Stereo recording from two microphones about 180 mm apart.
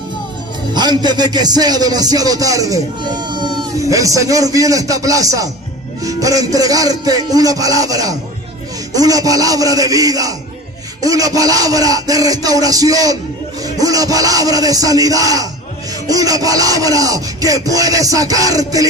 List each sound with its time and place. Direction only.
0.7 s music: 25° right (ahead or behind)